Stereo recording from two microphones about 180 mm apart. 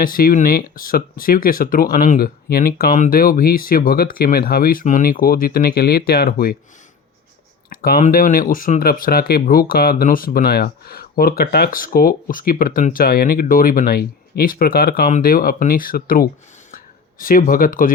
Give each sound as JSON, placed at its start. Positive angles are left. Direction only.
{"t": 0.0, "sound": "speech", "side_deg": 50}
{"t": 7.7, "sound": "speech", "side_deg": 55}